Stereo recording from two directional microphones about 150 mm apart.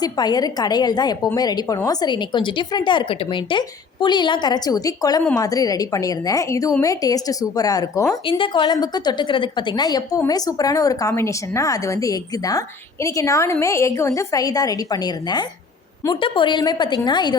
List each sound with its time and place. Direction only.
0.0 s a woman's voice: 25° left (ahead or behind)